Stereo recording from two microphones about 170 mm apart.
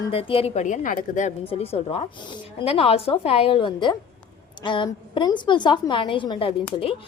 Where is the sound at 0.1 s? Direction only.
30° left (ahead or behind); by 1.3 s 50° left (ahead or behind).